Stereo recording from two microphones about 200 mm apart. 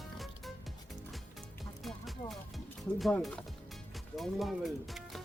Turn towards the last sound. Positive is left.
turn(degrees=0)  # may be behind; listen again after turning